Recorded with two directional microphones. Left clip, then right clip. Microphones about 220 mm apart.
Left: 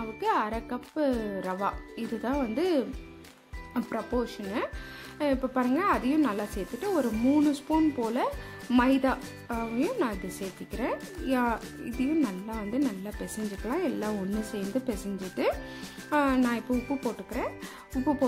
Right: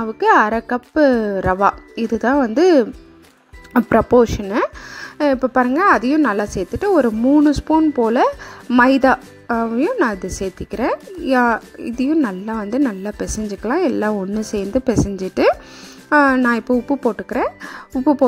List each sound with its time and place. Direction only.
0.0 s speech: 30° right (ahead or behind)
8.8 s speech: 30° right (ahead or behind)